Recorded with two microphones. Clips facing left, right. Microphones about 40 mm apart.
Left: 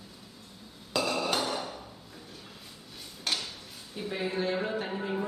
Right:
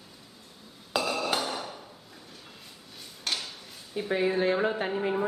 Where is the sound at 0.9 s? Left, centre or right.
Centre.